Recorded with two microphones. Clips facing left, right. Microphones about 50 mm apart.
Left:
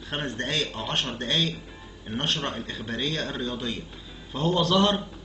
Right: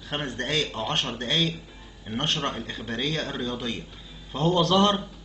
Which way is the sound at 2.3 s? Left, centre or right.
Right.